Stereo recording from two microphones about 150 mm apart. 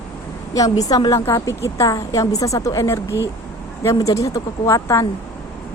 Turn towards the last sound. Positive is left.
turn(degrees=20)  # may be behind; listen again after turning